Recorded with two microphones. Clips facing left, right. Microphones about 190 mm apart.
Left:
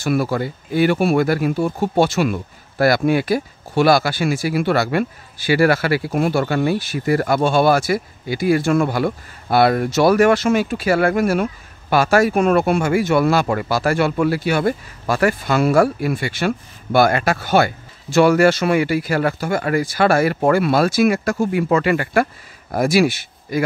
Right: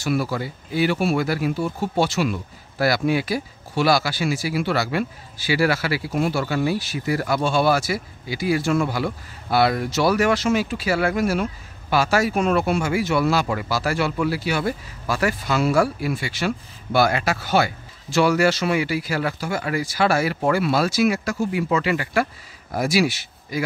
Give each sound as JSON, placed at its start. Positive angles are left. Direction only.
{"t": 0.0, "sound": "speech", "side_deg": 55}